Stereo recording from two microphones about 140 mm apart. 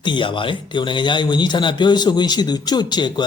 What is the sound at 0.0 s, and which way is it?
A man's voice, 35° left (ahead or behind).